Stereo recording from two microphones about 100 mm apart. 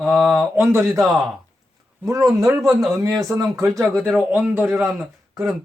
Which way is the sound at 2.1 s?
35° right (ahead or behind).